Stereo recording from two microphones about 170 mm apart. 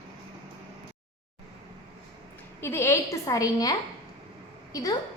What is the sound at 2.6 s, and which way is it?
A woman's voice, 15° left (ahead or behind).